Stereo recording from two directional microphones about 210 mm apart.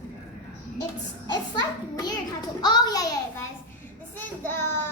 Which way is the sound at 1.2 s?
20° left (ahead or behind).